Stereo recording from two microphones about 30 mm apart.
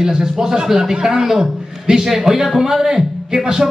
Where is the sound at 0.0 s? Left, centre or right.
Centre.